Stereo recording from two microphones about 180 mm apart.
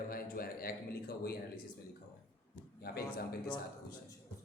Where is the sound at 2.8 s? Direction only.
60° left (ahead or behind).